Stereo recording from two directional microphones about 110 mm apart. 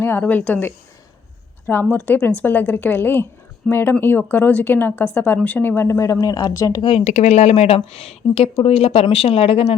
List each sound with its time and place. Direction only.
0.0 s a woman's voice: 15° left (ahead or behind)
7.0 s speech: 90° left; by 9.6 s 65° left (ahead or behind)